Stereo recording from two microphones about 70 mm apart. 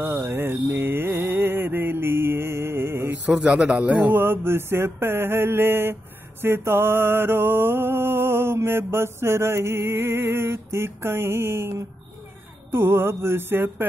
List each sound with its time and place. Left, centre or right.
0.0 s mantra: right
3.3 s a man's voice: centre
3.9 s music: right
12.7 s music: right